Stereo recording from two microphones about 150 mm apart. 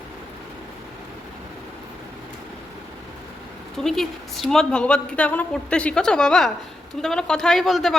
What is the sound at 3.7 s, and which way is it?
A woman's voice, centre (ahead or behind).